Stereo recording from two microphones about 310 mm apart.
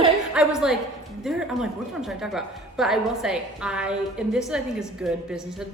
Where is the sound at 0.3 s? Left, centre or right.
Centre.